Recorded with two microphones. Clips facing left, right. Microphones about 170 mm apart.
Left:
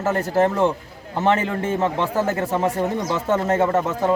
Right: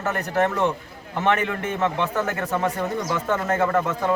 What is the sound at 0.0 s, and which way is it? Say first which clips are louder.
A man's voice: left 4 dB; 30° left (ahead or behind).